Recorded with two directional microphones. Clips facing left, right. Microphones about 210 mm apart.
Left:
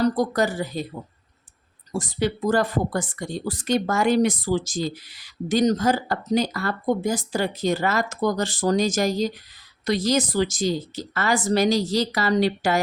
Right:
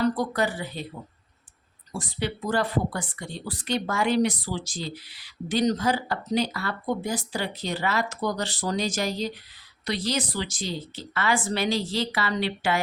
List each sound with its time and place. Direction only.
0.0 s a woman's voice: 40° left (ahead or behind)
1.9 s a woman's voice: 45° left (ahead or behind)